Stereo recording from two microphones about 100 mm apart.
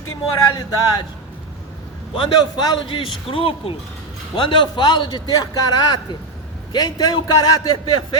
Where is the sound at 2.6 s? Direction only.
55° left (ahead or behind).